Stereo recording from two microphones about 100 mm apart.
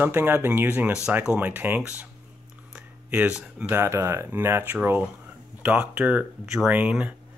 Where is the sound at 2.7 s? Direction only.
15° right (ahead or behind).